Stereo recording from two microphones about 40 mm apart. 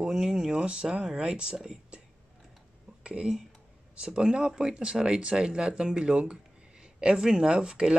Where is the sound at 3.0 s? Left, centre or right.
Right.